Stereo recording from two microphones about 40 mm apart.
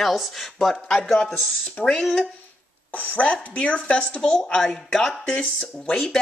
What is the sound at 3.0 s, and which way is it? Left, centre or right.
Speech, left.